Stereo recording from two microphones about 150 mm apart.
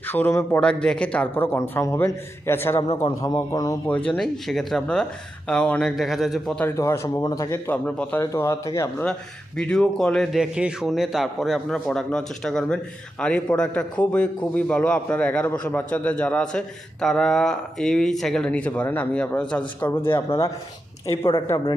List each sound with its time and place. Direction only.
0.1 s a man's voice: 15° left (ahead or behind)
0.6 s a man's voice: 5° left (ahead or behind); by 3.8 s 25° left (ahead or behind)
3.8 s a man's voice: 10° left (ahead or behind)
6.7 s speech: 20° left (ahead or behind)
7.7 s a man's voice: 10° left (ahead or behind)
9.6 s a man's voice: 5° left (ahead or behind)